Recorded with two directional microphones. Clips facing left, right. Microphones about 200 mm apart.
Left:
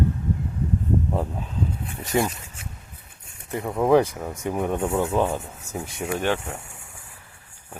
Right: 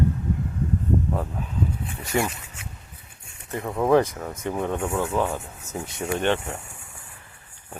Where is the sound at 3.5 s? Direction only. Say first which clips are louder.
Left 1 dB; 10° left (ahead or behind).